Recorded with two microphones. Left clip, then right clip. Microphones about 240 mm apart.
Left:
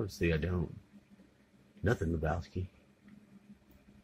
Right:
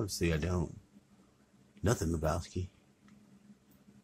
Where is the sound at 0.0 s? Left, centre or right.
Centre.